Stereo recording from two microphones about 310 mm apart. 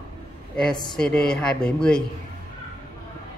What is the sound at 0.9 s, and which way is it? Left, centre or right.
Speech, centre.